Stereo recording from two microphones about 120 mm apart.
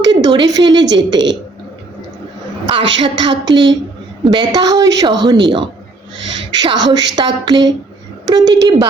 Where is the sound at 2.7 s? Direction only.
40° right (ahead or behind).